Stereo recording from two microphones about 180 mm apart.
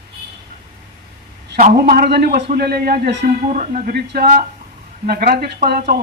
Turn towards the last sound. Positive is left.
turn(degrees=-60)  # may be behind; listen again after turning